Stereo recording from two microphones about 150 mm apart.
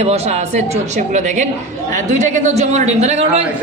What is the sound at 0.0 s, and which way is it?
Speech, 45° right (ahead or behind).